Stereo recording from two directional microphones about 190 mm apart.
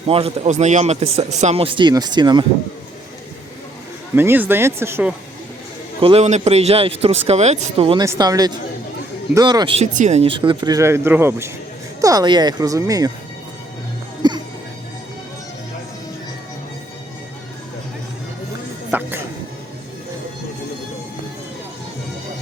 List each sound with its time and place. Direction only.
0.1 s speech: 30° right (ahead or behind)
4.1 s speech: 10° right (ahead or behind)
6.0 s speech: 30° right (ahead or behind)
14.2 s music: 20° right (ahead or behind)
18.9 s music: 10° right (ahead or behind)